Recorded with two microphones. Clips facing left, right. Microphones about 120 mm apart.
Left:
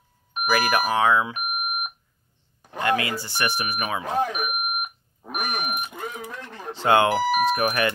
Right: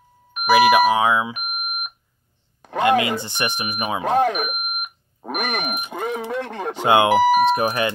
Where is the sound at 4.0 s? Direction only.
70° right (ahead or behind); by 6.2 s 90° right.